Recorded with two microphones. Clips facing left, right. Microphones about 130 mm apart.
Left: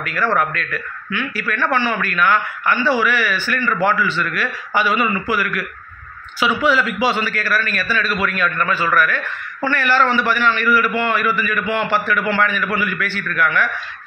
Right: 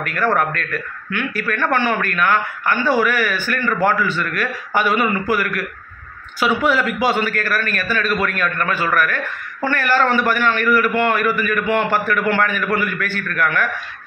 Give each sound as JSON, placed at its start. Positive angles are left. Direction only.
{"t": 0.0, "sound": "a man's voice", "side_deg": -50}